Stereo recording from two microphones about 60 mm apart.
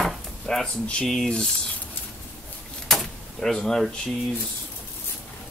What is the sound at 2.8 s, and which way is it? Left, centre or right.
Power windows, centre.